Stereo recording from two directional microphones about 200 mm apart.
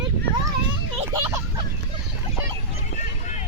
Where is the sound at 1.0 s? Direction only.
15° right (ahead or behind).